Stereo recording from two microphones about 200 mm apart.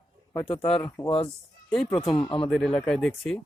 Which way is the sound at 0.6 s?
5° left (ahead or behind).